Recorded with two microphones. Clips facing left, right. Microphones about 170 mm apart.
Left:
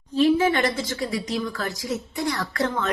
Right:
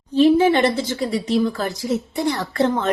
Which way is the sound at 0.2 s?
25° right (ahead or behind).